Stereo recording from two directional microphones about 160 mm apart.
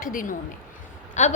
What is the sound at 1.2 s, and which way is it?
Speech, 45° left (ahead or behind).